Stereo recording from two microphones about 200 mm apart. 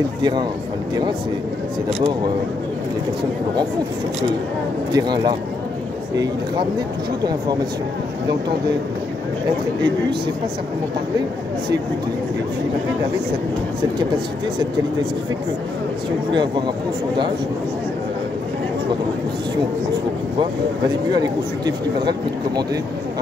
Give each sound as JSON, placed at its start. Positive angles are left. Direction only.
{"t": 0.2, "sound": "speech", "side_deg": -20}
{"t": 4.9, "sound": "speech", "side_deg": -20}
{"t": 16.3, "sound": "speech", "side_deg": -20}
{"t": 21.1, "sound": "speech", "side_deg": -20}